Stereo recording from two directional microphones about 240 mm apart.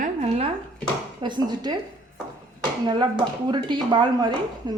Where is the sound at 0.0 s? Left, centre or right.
Right.